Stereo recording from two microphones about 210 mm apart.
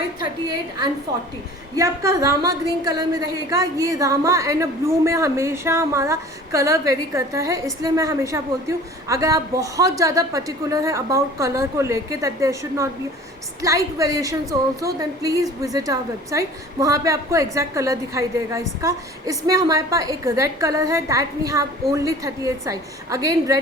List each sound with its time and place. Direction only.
0.2 s a woman's voice: 20° right (ahead or behind)